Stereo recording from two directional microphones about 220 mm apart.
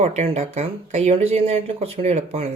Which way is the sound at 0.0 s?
30° right (ahead or behind).